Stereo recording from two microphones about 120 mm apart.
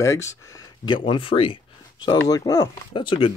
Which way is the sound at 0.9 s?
45° left (ahead or behind).